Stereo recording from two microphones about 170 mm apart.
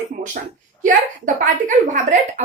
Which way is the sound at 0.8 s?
50° right (ahead or behind).